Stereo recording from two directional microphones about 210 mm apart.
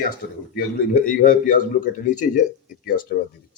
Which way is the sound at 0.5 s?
40° left (ahead or behind).